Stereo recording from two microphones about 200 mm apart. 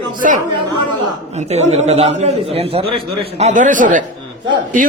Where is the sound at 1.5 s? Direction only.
35° right (ahead or behind).